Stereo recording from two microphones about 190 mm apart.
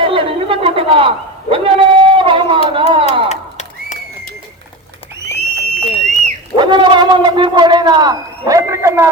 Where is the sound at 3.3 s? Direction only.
40° left (ahead or behind).